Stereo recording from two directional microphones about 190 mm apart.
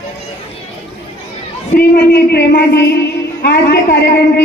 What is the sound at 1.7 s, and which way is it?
Speech, 55° left (ahead or behind).